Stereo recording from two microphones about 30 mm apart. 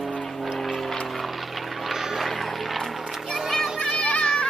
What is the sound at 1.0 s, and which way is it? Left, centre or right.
Vehicle, centre.